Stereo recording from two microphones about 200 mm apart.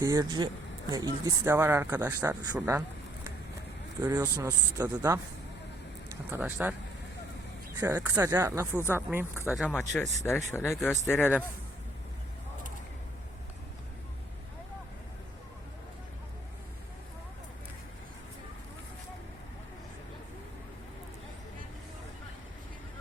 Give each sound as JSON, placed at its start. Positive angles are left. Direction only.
{"t": 0.0, "sound": "speech", "side_deg": -20}
{"t": 4.0, "sound": "speech", "side_deg": -15}
{"t": 7.8, "sound": "speech", "side_deg": -15}
{"t": 9.6, "sound": "speech", "side_deg": 10}